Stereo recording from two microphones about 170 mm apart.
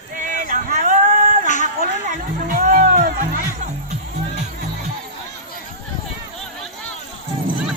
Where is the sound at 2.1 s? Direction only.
50° right (ahead or behind).